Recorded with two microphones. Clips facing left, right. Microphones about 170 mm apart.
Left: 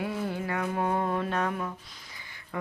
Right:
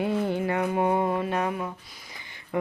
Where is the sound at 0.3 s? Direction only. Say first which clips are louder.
Right 5 dB; 25° right (ahead or behind).